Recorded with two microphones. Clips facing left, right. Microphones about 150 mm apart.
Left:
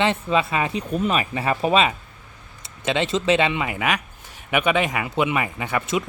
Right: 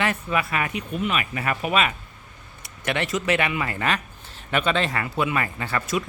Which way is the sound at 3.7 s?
10° left (ahead or behind).